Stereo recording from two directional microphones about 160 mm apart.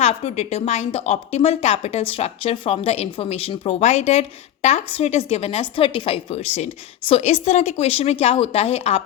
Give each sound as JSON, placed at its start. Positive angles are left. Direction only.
{"t": 0.0, "sound": "a woman's voice", "side_deg": 40}